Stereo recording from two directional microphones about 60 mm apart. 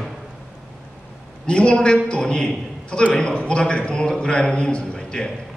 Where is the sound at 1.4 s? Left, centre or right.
Centre.